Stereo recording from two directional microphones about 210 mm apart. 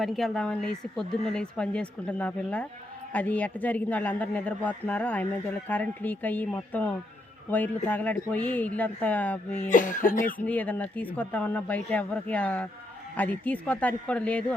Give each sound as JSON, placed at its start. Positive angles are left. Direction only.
{"t": 0.0, "sound": "speech", "side_deg": 0}
{"t": 9.6, "sound": "speech", "side_deg": 40}
{"t": 10.4, "sound": "speech", "side_deg": 5}